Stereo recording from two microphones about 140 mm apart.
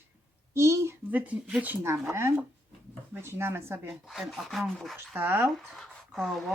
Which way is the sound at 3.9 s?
Centre (ahead or behind).